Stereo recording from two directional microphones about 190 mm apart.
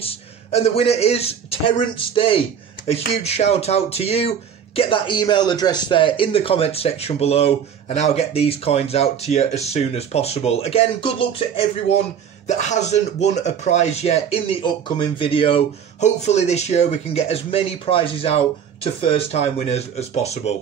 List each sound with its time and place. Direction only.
0.0 s speech: 30° left (ahead or behind)